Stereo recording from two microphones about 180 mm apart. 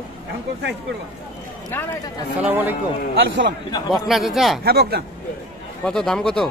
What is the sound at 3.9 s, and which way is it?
Speech, centre (ahead or behind).